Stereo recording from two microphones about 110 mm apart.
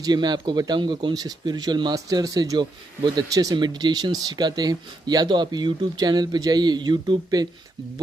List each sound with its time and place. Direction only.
0.0 s speech: 40° right (ahead or behind)